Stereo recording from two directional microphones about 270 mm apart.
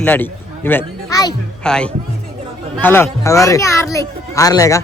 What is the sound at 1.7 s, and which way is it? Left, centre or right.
A child's voice, centre.